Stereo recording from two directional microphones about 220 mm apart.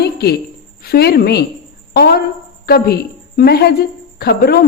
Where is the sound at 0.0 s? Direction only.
45° left (ahead or behind).